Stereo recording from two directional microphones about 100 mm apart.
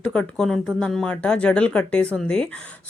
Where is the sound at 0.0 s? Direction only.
10° left (ahead or behind).